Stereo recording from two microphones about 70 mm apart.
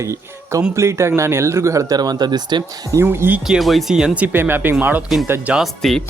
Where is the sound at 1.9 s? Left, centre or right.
Right.